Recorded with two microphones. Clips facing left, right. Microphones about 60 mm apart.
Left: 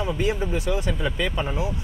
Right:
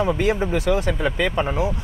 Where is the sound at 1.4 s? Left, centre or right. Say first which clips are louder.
Right 5 dB; right.